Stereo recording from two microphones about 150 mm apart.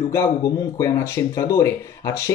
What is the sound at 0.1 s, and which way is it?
Speech, 20° left (ahead or behind).